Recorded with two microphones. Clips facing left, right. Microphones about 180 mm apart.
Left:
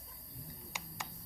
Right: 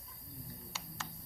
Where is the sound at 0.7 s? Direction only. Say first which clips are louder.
Left 3 dB; 15° left (ahead or behind).